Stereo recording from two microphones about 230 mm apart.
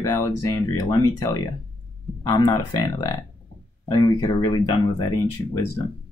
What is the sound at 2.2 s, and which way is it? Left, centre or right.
Speech, centre.